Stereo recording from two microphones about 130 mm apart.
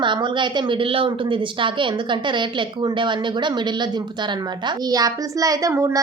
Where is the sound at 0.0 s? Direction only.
35° right (ahead or behind).